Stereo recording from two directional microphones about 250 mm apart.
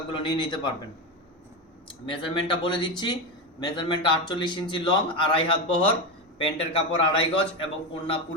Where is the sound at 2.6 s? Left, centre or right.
Centre.